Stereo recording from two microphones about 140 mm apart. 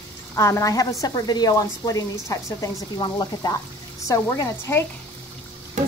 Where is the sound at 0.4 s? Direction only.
20° left (ahead or behind).